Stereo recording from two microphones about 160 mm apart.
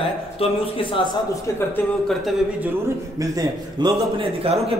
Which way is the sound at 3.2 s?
20° right (ahead or behind).